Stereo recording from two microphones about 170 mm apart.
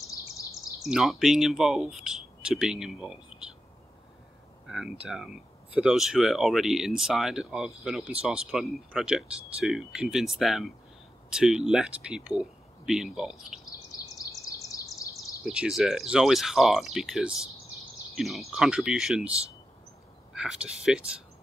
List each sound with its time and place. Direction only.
0.8 s speech: centre (ahead or behind)
4.6 s speech: 5° right (ahead or behind)
13.7 s bird vocalization: 20° left (ahead or behind)
15.4 s speech: 5° right (ahead or behind)
20.3 s speech: 5° right (ahead or behind)